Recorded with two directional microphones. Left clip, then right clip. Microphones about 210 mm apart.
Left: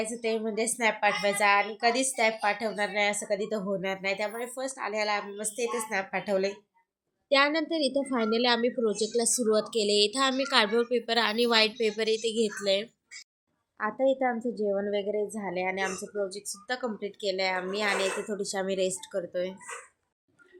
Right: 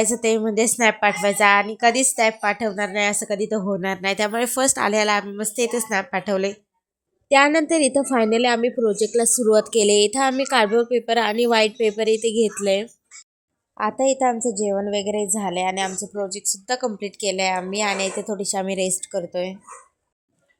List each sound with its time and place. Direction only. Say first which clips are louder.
0.0 s a woman's voice: right 10 dB; 40° right (ahead or behind)